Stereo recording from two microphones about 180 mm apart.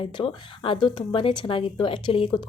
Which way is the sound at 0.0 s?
30° left (ahead or behind).